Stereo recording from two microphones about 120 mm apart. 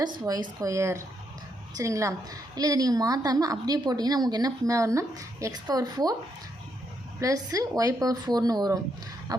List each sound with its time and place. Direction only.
0.0 s a woman's voice: 35° right (ahead or behind)
0.6 s a woman's voice: 25° right (ahead or behind)
7.2 s a woman's voice: 30° right (ahead or behind)